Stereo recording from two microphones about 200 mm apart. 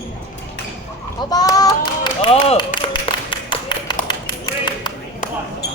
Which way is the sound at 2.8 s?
25° left (ahead or behind).